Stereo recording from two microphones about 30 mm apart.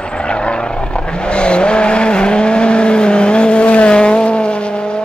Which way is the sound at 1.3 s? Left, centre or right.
Left.